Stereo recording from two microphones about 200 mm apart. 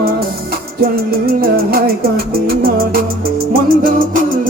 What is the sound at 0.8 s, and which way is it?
Music, 50° right (ahead or behind).